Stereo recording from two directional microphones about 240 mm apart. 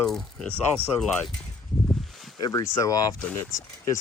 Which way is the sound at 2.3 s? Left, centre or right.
Centre.